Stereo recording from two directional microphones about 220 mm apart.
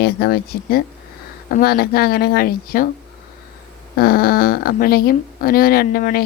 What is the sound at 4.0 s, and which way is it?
Speech, 45° left (ahead or behind).